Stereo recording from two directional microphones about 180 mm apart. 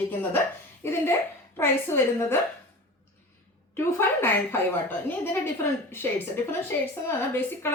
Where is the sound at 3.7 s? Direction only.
15° left (ahead or behind).